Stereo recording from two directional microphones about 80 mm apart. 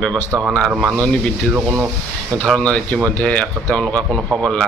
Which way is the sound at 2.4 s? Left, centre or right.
Centre.